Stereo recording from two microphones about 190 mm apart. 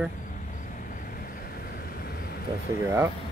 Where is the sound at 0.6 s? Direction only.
45° left (ahead or behind).